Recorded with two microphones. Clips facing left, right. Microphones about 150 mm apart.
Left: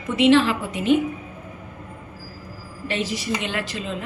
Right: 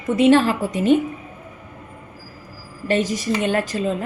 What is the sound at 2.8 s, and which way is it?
A woman's voice, 45° right (ahead or behind).